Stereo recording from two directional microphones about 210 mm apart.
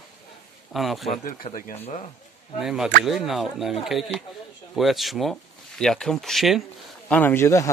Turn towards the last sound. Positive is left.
turn(degrees=15)  # may be behind; listen again after turning